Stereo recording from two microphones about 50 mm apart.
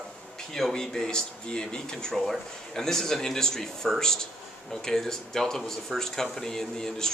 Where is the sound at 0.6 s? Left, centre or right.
Centre.